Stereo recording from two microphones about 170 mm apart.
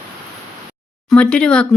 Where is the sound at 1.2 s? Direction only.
5° left (ahead or behind).